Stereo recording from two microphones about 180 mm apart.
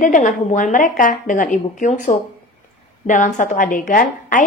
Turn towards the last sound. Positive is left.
turn(degrees=50)  # may be behind; listen again after turning